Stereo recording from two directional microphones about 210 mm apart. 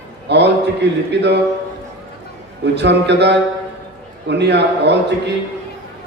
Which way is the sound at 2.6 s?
55° right (ahead or behind).